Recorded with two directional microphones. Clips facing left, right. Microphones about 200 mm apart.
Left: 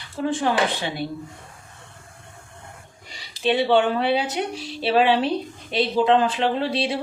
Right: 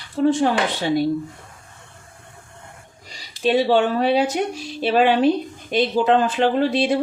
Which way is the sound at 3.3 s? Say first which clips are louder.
Right 2 dB; 45° right (ahead or behind).